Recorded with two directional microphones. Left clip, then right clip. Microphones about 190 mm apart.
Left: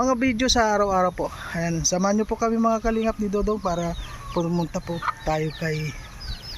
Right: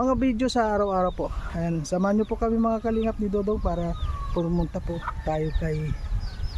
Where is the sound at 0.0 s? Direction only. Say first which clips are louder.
Left 2 dB; 5° right (ahead or behind).